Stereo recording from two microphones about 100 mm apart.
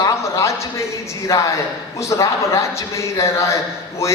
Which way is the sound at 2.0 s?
30° left (ahead or behind).